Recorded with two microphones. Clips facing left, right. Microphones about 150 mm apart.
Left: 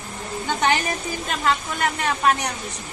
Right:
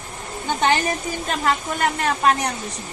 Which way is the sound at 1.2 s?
40° right (ahead or behind).